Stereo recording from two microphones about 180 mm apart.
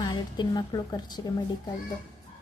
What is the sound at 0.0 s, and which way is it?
A woman's voice, 25° left (ahead or behind).